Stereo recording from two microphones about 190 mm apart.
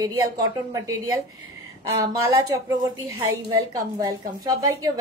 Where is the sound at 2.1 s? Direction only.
15° right (ahead or behind).